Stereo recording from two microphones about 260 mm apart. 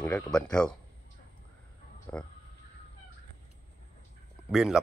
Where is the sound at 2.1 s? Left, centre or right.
Centre.